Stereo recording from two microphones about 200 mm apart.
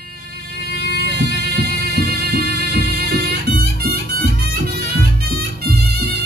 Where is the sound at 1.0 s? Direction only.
55° right (ahead or behind).